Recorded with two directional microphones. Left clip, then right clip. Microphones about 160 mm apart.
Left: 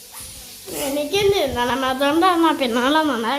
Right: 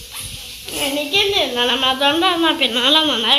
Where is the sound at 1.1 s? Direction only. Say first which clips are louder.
Right 2 dB; 90° left.